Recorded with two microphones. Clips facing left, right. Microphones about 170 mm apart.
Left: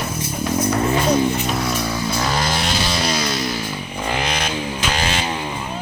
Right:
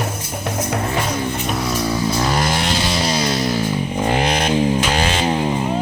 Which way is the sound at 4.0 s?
45° right (ahead or behind).